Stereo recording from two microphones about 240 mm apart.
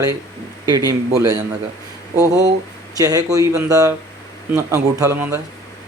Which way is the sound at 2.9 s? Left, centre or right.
Centre.